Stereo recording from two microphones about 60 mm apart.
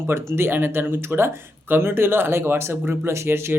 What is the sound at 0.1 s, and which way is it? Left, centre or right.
Speech, right.